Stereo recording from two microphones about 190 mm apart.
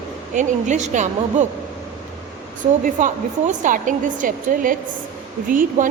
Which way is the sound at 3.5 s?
45° right (ahead or behind).